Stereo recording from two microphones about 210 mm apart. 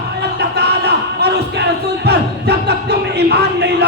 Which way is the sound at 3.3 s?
50° right (ahead or behind).